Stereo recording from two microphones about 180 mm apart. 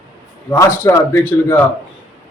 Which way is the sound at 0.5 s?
15° left (ahead or behind).